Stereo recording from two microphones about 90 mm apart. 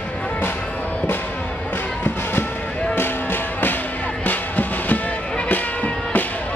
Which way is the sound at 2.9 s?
25° left (ahead or behind).